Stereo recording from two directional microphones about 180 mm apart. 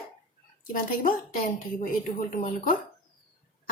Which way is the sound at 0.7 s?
50° left (ahead or behind).